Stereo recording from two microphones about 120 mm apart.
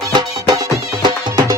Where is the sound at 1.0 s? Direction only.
35° right (ahead or behind).